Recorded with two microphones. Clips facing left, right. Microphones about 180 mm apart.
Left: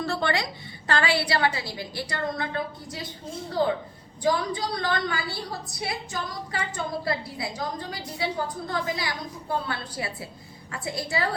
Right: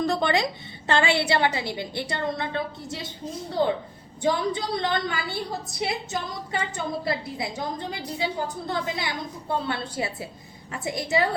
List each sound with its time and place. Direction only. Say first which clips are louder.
0.0 s a woman's voice: right 4 dB; 15° right (ahead or behind)
4.2 s a woman's voice: right 1 dB; 25° right (ahead or behind)